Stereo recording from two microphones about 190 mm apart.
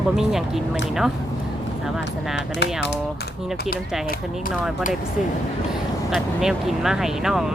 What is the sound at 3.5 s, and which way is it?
Speech, 55° left (ahead or behind).